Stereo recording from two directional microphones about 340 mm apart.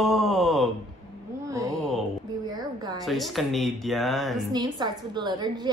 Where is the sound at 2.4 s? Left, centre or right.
Centre.